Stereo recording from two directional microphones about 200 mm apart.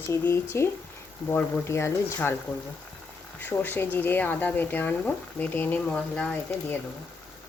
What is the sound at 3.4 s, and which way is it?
Speech, 10° left (ahead or behind).